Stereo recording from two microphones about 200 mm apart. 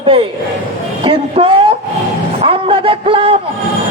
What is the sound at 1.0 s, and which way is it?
Speech, 25° right (ahead or behind).